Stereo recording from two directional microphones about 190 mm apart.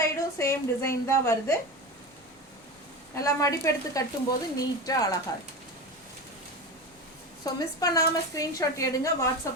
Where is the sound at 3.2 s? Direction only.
15° left (ahead or behind).